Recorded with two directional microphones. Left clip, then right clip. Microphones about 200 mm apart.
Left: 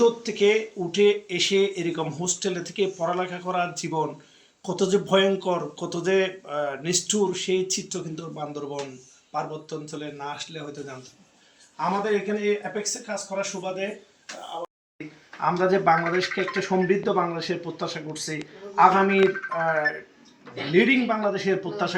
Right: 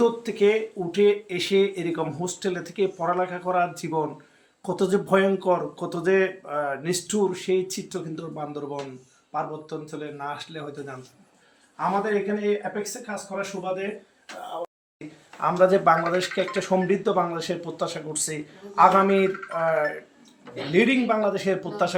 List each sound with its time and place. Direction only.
0.0 s speech: 5° right (ahead or behind)
15.4 s speech: 20° right (ahead or behind)
20.7 s speech: 25° right (ahead or behind)